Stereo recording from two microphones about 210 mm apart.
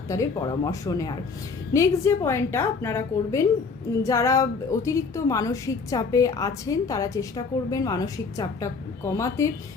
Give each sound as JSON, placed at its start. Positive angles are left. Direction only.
{"t": 0.1, "sound": "a woman's voice", "side_deg": 15}